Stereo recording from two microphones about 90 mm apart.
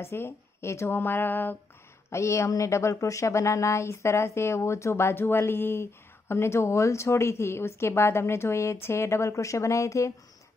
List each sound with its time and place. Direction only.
0.0 s a woman's voice: 30° left (ahead or behind)
2.0 s speech: 30° left (ahead or behind)